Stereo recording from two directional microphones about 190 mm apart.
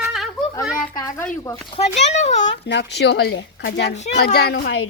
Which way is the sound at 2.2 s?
35° left (ahead or behind).